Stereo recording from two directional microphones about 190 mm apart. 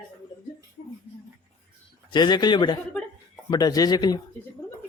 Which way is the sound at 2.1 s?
25° left (ahead or behind).